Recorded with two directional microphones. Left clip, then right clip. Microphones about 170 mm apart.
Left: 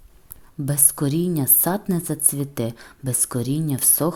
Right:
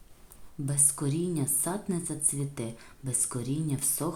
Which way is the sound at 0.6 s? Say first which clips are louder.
Left 7 dB; 40° left (ahead or behind).